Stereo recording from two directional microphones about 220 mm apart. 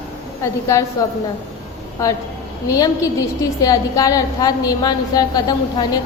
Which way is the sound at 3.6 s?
15° left (ahead or behind).